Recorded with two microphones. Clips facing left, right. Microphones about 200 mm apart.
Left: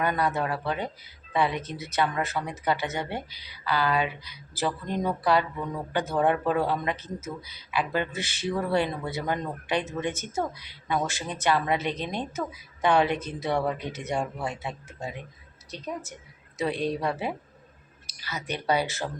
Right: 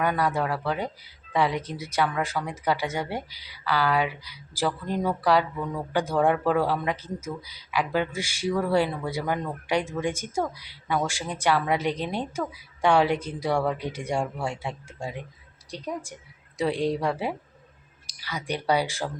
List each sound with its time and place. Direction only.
0.0 s speech: 10° right (ahead or behind)